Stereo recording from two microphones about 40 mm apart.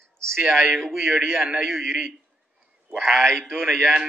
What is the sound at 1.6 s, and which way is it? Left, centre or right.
Speech, centre.